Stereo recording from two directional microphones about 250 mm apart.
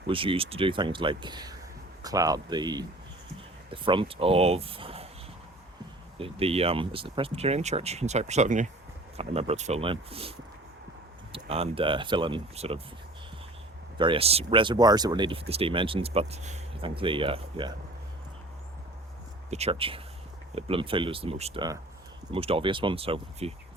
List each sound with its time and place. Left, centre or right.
0.1 s speech: right
6.1 s speech: right
11.4 s speech: right
14.0 s speech: right
19.5 s speech: right